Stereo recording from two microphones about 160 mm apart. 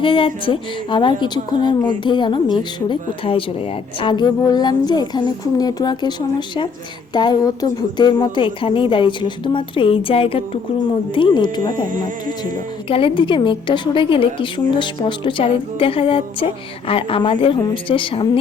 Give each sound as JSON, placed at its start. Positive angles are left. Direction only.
{"t": 0.0, "sound": "a woman's voice", "side_deg": 35}
{"t": 12.9, "sound": "a woman's voice", "side_deg": 35}